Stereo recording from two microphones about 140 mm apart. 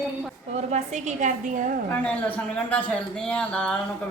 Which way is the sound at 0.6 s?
55° right (ahead or behind).